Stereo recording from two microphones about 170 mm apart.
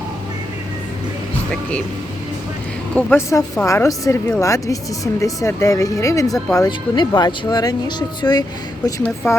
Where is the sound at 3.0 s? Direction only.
15° left (ahead or behind).